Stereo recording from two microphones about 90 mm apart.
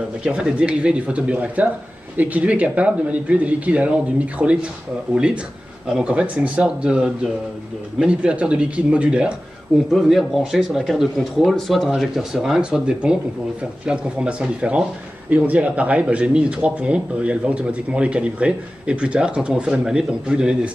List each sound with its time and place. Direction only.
0.2 s a man's voice: 10° right (ahead or behind)